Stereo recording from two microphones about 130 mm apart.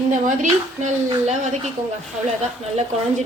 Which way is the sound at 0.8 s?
60° right (ahead or behind).